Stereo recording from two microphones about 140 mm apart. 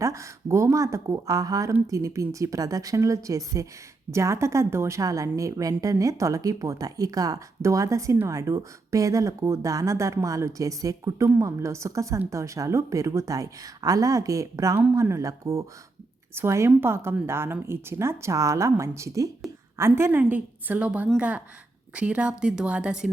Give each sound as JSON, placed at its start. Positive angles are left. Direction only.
{"t": 0.0, "sound": "a woman's voice", "side_deg": -20}